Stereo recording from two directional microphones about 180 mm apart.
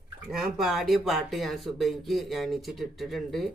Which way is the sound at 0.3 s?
Centre (ahead or behind).